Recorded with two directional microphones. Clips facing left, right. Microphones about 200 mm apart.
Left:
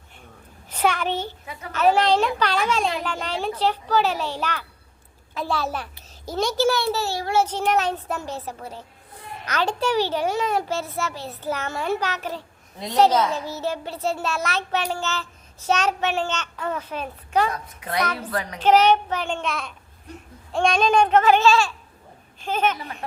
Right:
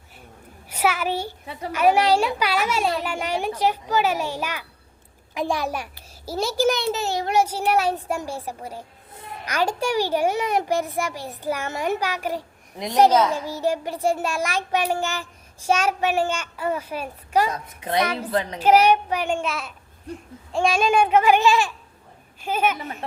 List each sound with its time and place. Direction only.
0.7 s a sound: 5° right (ahead or behind)
1.7 s a child's voice: 10° right (ahead or behind)
6.7 s child singing: 20° right (ahead or behind)
7.4 s a child's voice: 10° right (ahead or behind)
17.5 s child singing: 25° right (ahead or behind)
18.0 s a child's voice: 10° right (ahead or behind)
18.3 s child singing: 25° right (ahead or behind)
18.6 s a child's voice: 10° right (ahead or behind)